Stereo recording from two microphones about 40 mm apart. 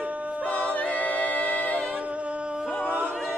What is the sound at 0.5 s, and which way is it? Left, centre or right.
Choir, left.